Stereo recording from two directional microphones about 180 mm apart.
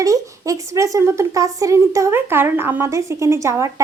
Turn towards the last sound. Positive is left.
turn(degrees=-15)  # may be behind; listen again after turning